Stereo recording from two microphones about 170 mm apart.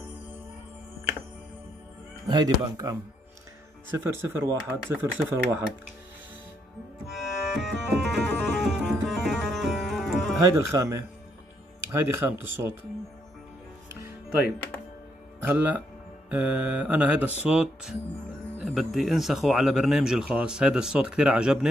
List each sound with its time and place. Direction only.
2.2 s speech: 25° right (ahead or behind)
7.2 s music: centre (ahead or behind)
10.4 s speech: 20° right (ahead or behind)
15.4 s speech: 10° right (ahead or behind)